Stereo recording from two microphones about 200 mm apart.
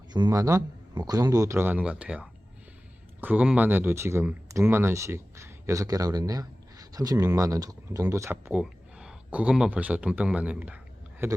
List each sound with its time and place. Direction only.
0.1 s a man's voice: 20° right (ahead or behind)